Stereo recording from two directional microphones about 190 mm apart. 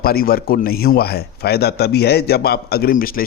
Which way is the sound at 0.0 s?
50° left (ahead or behind).